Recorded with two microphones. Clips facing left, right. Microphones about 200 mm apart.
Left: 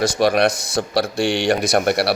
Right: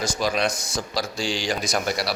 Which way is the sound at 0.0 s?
65° left (ahead or behind).